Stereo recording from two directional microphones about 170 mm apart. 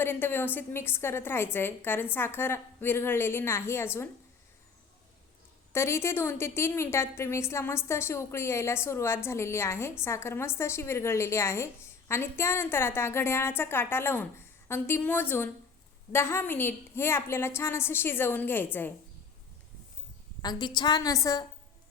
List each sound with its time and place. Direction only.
0.0 s a woman's voice: 15° left (ahead or behind)
5.7 s a woman's voice: 15° left (ahead or behind)
20.4 s a woman's voice: 25° left (ahead or behind)